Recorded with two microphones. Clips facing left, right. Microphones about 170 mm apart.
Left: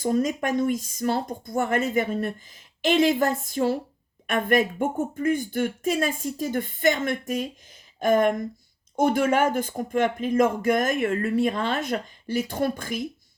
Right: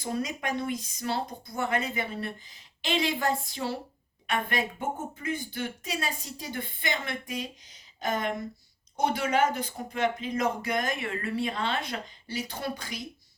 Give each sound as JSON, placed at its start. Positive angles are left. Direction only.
{"t": 0.0, "sound": "speech", "side_deg": 45}